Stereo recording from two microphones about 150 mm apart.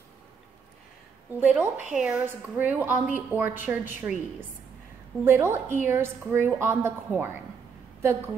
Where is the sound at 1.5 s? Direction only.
10° right (ahead or behind).